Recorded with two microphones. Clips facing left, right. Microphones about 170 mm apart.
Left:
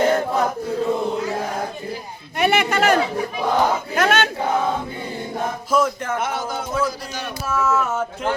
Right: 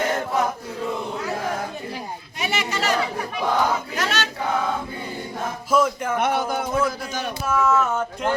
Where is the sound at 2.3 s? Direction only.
60° left (ahead or behind).